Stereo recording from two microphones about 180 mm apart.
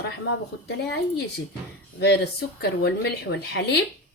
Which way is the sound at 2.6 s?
65° left (ahead or behind).